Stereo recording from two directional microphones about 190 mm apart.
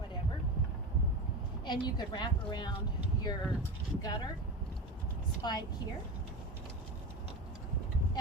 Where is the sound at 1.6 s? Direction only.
25° left (ahead or behind).